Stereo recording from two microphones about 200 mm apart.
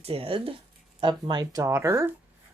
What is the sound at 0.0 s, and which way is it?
Speech, 30° right (ahead or behind).